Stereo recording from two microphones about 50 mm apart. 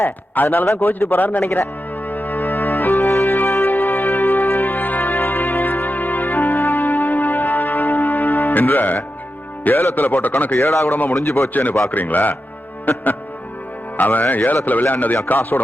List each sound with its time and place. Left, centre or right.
0.4 s speech: left
2.0 s music: left
2.9 s music: left
3.4 s music: left
9.9 s speech: left
10.6 s a man's voice: left
10.9 s speech: left
11.3 s a man's voice: left
11.5 s speech: left
13.9 s speech: left